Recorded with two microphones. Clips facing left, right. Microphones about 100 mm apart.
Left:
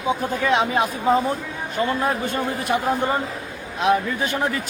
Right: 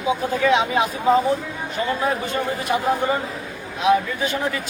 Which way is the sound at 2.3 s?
50° left (ahead or behind).